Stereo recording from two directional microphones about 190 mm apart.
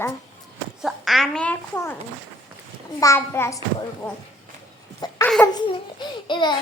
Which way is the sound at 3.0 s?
15° left (ahead or behind).